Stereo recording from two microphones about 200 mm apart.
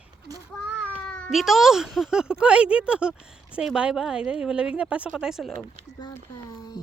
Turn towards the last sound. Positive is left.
turn(degrees=-5)  # may be behind; listen again after turning